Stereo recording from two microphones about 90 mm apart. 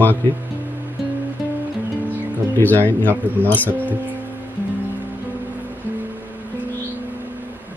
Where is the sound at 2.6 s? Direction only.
20° left (ahead or behind).